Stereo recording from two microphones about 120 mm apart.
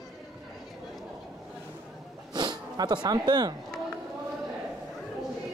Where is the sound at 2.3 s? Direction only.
35° right (ahead or behind).